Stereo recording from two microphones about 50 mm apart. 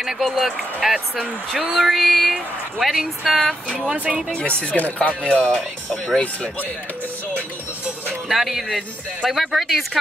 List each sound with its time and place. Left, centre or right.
0.0 s a woman's voice: centre
3.9 s speech: right
4.3 s speech: left
8.3 s a woman's voice: centre